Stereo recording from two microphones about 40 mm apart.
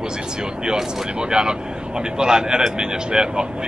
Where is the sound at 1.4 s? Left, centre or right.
Centre.